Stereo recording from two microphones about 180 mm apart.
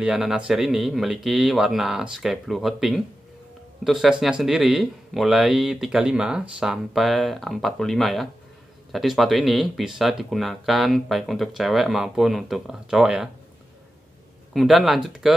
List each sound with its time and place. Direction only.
0.0 s speech: 5° right (ahead or behind)
14.5 s speech: centre (ahead or behind)